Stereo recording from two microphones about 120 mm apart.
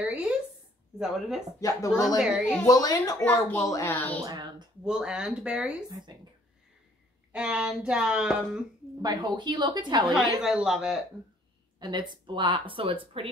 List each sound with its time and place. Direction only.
0.0 s a sound: 10° right (ahead or behind)
0.9 s speech: 5° right (ahead or behind)
1.6 s speech: 30° left (ahead or behind)
2.1 s speech: 5° right (ahead or behind)
2.6 s speech: 30° left (ahead or behind)
4.3 s a woman's voice: 35° right (ahead or behind)
4.8 s a woman's voice: 5° right (ahead or behind)
7.3 s a woman's voice: 10° right (ahead or behind)
9.0 s a woman's voice: 35° right (ahead or behind)
10.4 s speech: 5° right (ahead or behind)
11.8 s speech: 40° right (ahead or behind)